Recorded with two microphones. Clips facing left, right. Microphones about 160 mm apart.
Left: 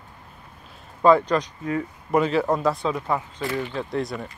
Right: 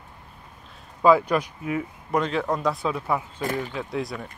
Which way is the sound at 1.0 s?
5° right (ahead or behind).